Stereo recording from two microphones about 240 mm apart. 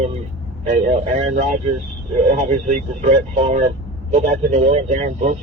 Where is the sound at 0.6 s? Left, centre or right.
Right.